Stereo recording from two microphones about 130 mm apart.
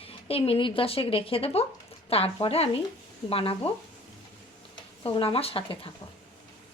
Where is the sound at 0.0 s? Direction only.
45° left (ahead or behind).